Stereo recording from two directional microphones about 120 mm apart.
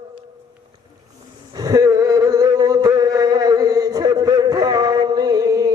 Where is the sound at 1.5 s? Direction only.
30° right (ahead or behind).